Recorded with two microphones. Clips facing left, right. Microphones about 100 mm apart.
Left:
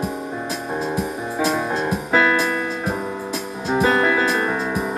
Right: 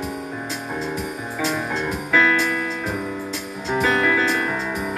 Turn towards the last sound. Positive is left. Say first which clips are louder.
# left 2 dB
turn(degrees=30)  # may be behind; listen again after turning